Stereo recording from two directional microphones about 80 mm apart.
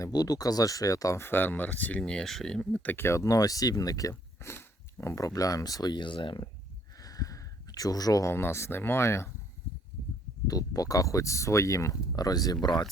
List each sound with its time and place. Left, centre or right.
0.0 s speech: left
1.2 s speech: left; by 2.9 s centre
2.9 s speech: left
4.1 s speech: left
7.0 s a sound: left
8.2 s speech: left
10.4 s speech: left